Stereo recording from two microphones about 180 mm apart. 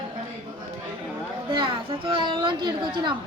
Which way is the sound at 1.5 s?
30° right (ahead or behind).